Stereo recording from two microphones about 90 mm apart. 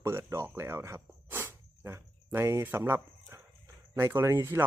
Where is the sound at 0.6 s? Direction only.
30° right (ahead or behind).